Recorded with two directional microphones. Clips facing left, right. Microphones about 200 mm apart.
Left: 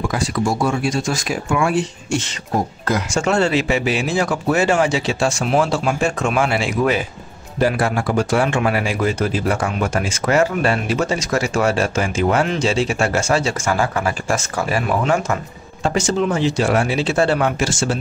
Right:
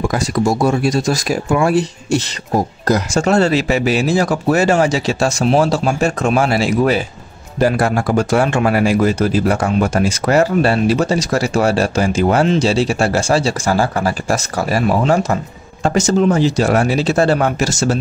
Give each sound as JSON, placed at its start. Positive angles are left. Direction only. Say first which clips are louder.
{"t": 0.1, "sound": "speech", "louder": "right 4 dB", "side_deg": -40}